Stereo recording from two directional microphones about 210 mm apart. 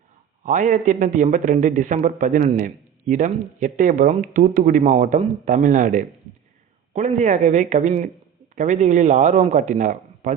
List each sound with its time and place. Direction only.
0.4 s speech: 35° right (ahead or behind)